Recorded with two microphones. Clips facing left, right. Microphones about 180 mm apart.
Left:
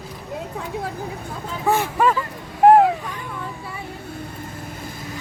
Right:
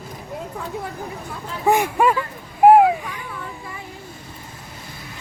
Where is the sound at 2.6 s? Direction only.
10° right (ahead or behind).